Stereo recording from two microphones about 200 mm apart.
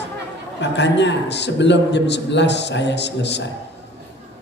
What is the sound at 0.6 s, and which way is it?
A woman's voice, 60° left (ahead or behind).